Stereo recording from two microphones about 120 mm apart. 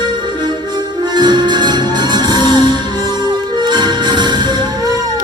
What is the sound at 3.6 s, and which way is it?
Music, 35° right (ahead or behind).